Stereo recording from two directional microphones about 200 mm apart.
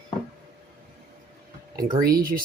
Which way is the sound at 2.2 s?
45° right (ahead or behind).